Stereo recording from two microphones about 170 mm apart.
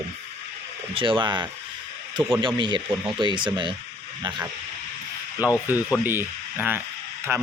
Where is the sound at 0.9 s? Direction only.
30° right (ahead or behind).